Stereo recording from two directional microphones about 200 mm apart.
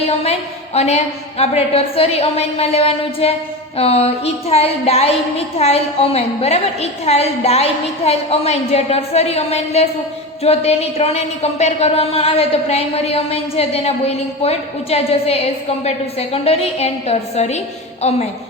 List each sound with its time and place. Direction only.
0.2 s a woman's voice: 30° left (ahead or behind)